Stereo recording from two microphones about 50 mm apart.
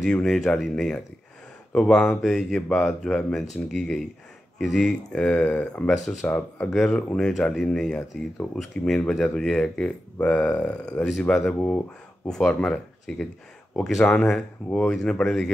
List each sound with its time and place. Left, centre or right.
0.0 s speech: centre
10.2 s speech: left
11.2 s speech: centre
11.6 s speech: left
12.3 s speech: centre
15.2 s speech: centre